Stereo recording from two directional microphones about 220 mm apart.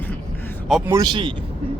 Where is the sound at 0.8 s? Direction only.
15° right (ahead or behind).